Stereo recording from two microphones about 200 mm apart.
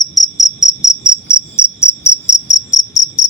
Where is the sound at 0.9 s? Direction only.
15° left (ahead or behind).